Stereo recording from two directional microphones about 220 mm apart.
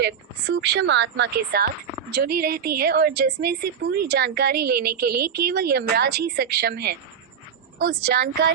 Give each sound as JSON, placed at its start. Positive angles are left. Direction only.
{"t": 0.0, "sound": "a woman's voice", "side_deg": -50}